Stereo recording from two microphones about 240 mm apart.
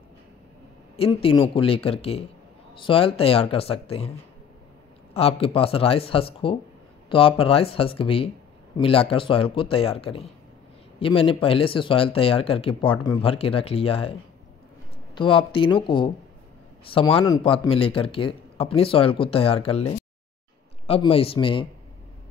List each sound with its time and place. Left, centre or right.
0.9 s speech: left
5.1 s speech: left
15.1 s speech: left